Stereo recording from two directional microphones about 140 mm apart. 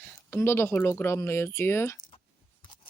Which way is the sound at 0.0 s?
15° left (ahead or behind).